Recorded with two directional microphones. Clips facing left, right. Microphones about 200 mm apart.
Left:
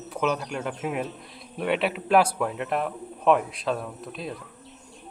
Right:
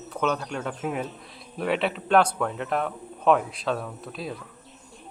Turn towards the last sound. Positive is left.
turn(degrees=0)  # may be behind; listen again after turning